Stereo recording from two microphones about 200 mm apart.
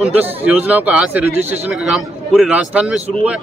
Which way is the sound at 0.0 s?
5° right (ahead or behind).